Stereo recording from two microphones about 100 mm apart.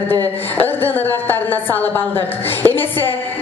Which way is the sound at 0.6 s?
20° left (ahead or behind).